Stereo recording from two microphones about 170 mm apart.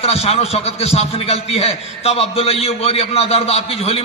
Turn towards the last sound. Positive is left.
turn(degrees=35)  # may be behind; listen again after turning